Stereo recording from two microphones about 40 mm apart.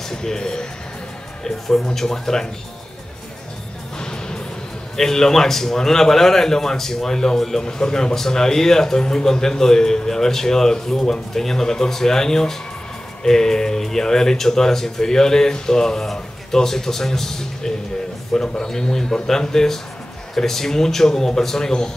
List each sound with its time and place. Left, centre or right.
0.1 s speech: centre
4.0 s music: centre
4.9 s speech: centre